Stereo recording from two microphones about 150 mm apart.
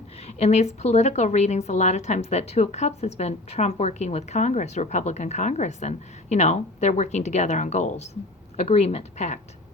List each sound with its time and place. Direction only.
0.3 s a woman's voice: 45° left (ahead or behind)